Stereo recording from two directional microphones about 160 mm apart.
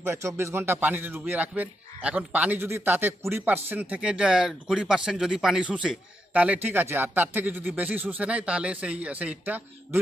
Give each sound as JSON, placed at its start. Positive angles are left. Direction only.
{"t": 0.0, "sound": "a man's voice", "side_deg": -15}